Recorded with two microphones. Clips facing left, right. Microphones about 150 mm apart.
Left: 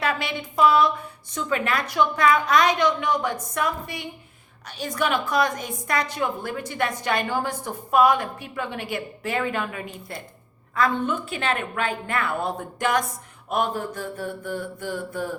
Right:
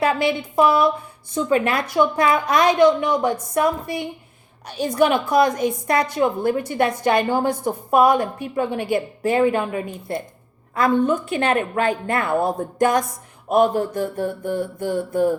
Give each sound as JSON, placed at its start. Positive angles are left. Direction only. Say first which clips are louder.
{"t": 0.2, "sound": "a woman's voice", "louder": "right 4 dB", "side_deg": -25}
{"t": 10.8, "sound": "a woman's voice", "louder": "right 5 dB", "side_deg": -40}